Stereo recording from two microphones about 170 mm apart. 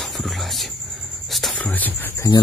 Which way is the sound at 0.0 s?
Centre (ahead or behind).